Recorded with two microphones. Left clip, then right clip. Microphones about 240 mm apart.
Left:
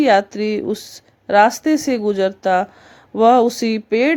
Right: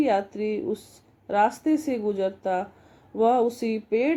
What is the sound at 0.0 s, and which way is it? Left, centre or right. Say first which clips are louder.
Speech: left 9 dB; left.